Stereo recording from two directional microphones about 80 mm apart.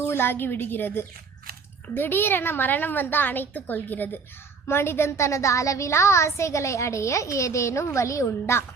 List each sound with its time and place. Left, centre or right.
0.1 s a woman's voice: left